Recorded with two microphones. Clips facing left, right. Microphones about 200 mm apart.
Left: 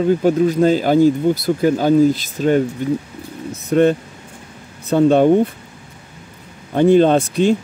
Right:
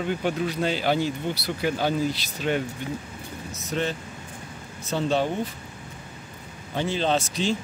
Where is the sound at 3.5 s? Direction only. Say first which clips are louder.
Left 14 dB; 55° left (ahead or behind).